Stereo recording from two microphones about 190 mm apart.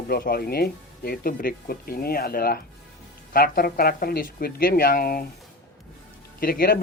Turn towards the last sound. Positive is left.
turn(degrees=50)  # may be behind; listen again after turning